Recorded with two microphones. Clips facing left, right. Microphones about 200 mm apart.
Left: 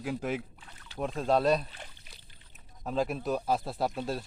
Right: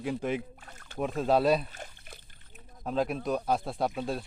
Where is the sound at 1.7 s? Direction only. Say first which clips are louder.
Right 4 dB; 50° right (ahead or behind).